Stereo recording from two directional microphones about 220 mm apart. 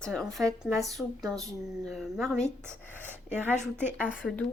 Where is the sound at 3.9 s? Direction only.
5° left (ahead or behind).